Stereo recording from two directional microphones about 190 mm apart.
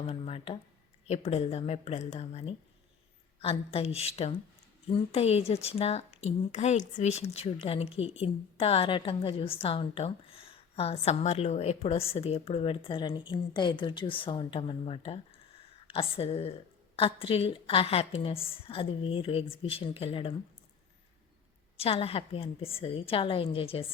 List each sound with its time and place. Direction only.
0.0 s a woman's voice: 30° left (ahead or behind)
21.8 s a woman's voice: 30° left (ahead or behind)